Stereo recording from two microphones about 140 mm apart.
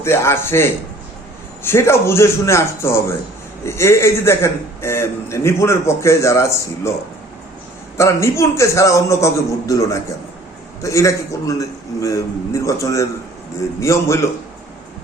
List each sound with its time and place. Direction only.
0.0 s a man's voice: 20° left (ahead or behind)
7.9 s a man's voice: 20° left (ahead or behind)